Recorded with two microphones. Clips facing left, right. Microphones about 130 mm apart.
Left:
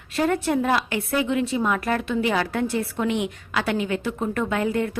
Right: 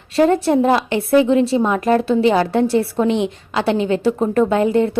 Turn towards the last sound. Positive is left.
turn(degrees=-25)  # may be behind; listen again after turning